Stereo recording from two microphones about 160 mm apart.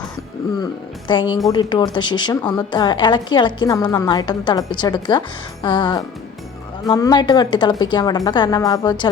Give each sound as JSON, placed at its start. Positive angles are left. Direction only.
{"t": 0.6, "sound": "a woman's voice", "side_deg": 30}